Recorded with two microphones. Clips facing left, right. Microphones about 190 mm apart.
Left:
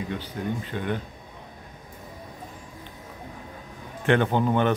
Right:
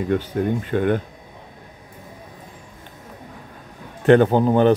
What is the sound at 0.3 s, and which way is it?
Speech, 55° right (ahead or behind).